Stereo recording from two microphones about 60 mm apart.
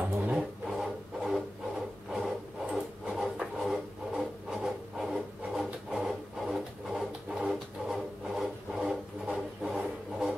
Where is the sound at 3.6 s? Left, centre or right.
Centre.